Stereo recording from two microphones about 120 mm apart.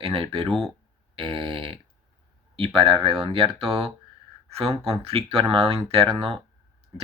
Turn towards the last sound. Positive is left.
turn(degrees=-50)  # may be behind; listen again after turning